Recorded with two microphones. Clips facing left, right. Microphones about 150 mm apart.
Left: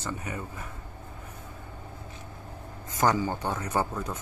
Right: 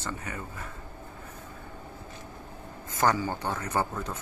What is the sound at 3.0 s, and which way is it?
Speech, 15° left (ahead or behind).